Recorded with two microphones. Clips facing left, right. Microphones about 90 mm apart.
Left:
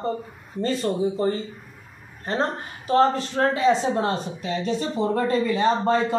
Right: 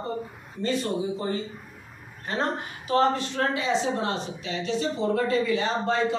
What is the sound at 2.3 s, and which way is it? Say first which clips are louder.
Speech: left 3 dB; 35° left (ahead or behind).